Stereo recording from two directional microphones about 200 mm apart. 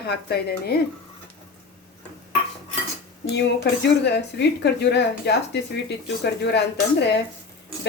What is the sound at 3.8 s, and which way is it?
Speech, 55° left (ahead or behind).